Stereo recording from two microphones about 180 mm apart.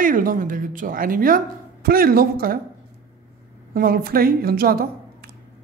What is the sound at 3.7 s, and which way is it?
A woman's voice, 55° right (ahead or behind).